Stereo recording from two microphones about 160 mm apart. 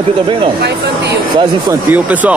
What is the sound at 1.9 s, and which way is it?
Speech, 10° right (ahead or behind).